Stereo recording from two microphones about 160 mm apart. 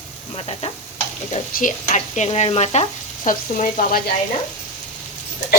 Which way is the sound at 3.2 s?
60° left (ahead or behind).